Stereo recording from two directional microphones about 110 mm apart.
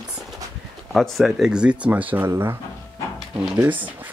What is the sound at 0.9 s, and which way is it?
Speech, centre (ahead or behind).